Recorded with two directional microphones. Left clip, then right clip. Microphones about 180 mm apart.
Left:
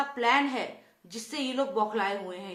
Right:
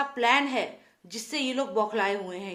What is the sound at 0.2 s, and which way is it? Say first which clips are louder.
A woman's voice: right 2 dB; 40° right (ahead or behind).